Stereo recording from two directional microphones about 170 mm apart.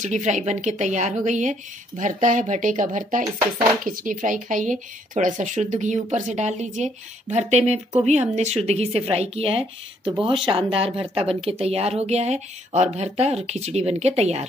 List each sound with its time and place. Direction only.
0.0 s speech: 45° right (ahead or behind)